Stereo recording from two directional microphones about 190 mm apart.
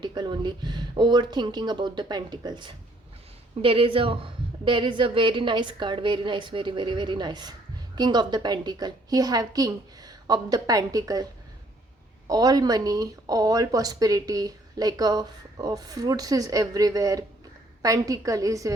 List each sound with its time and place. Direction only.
0.0 s speech: 25° right (ahead or behind)
12.3 s a woman's voice: 20° right (ahead or behind)